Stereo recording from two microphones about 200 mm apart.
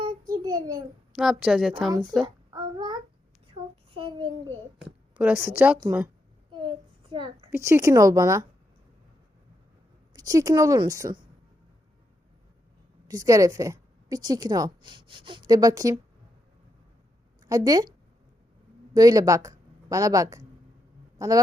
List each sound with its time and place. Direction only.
0.0 s a sound: 20° right (ahead or behind)
1.1 s a woman's voice: 5° right (ahead or behind)
2.2 s child singing: 20° right (ahead or behind)
3.9 s a sound: 25° right (ahead or behind)
5.1 s a woman's voice: 10° right (ahead or behind)
6.6 s a sound: 25° right (ahead or behind)
7.5 s a woman's voice: 15° right (ahead or behind)
10.1 s a woman's voice: 20° right (ahead or behind)
13.1 s a woman's voice: 15° right (ahead or behind)
17.4 s a woman's voice: 20° right (ahead or behind)
18.9 s a woman's voice: 20° right (ahead or behind)